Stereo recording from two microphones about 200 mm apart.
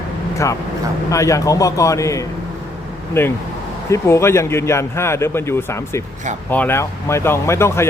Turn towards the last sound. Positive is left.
turn(degrees=15)  # may be behind; listen again after turning